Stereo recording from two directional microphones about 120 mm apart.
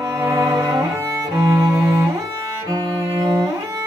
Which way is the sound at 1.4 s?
30° right (ahead or behind).